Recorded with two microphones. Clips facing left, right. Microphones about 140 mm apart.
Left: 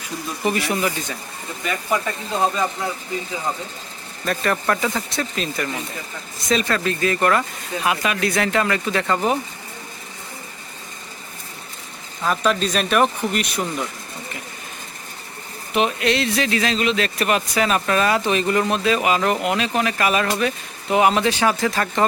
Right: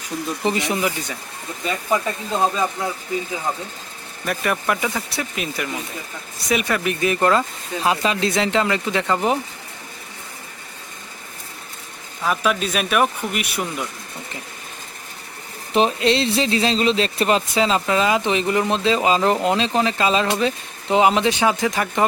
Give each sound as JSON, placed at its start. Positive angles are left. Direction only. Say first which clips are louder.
{"t": 0.4, "sound": "speech", "louder": "left 1 dB", "side_deg": -20}
{"t": 4.3, "sound": "speech", "louder": "left 1 dB", "side_deg": -10}
{"t": 12.2, "sound": "speech", "louder": "left 1 dB", "side_deg": -5}
{"t": 15.7, "sound": "speech", "louder": "right 2 dB", "side_deg": -30}